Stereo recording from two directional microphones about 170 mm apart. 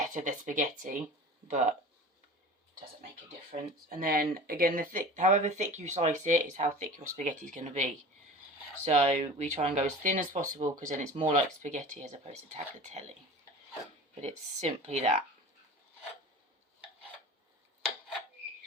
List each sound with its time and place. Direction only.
0.1 s speech: 50° right (ahead or behind)
3.5 s speech: 55° right (ahead or behind); by 9.7 s 40° right (ahead or behind)
10.0 s speech: 50° right (ahead or behind)
14.2 s speech: 40° right (ahead or behind)